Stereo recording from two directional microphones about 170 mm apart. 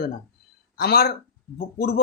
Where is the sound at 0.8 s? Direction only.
70° left (ahead or behind).